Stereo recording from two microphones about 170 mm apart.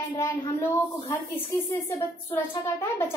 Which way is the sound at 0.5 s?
15° left (ahead or behind).